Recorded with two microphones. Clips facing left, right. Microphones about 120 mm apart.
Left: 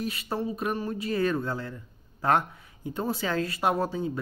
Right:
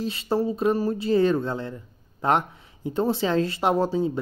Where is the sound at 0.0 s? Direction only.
25° right (ahead or behind).